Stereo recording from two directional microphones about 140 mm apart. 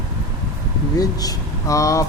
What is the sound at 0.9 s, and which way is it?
Speech, 25° left (ahead or behind).